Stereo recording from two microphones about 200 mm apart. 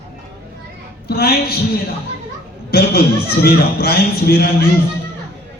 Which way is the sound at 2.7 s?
50° left (ahead or behind).